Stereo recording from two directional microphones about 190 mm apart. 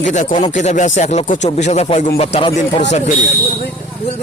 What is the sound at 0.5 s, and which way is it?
Speech, 40° left (ahead or behind).